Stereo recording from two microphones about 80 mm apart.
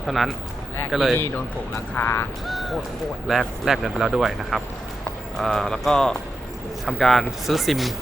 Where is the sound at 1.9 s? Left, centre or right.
Left.